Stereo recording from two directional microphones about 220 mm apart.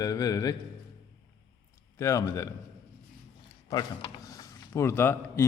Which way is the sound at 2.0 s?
15° left (ahead or behind).